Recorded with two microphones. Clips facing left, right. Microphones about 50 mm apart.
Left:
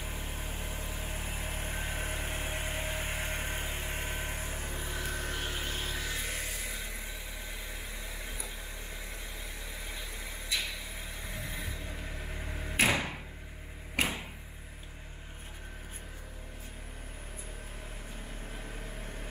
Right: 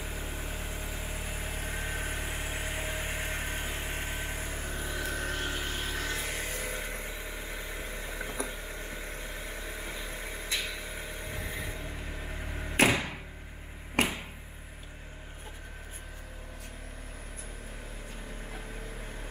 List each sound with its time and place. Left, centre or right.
0.0 s vehicle: centre
0.5 s vehicle: right
1.2 s vehicle: centre
4.9 s music: centre
6.4 s vehicle: right
7.7 s vehicle: right
11.3 s vehicle: right
12.2 s vehicle: centre
14.0 s a sound: right